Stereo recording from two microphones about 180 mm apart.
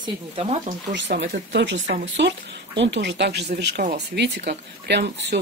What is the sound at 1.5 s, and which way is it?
Speech, 85° right.